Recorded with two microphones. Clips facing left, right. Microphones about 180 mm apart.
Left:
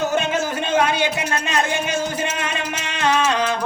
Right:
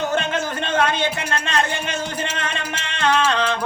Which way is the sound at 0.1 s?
10° left (ahead or behind).